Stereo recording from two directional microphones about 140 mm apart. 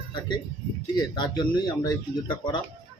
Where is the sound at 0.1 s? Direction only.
35° left (ahead or behind).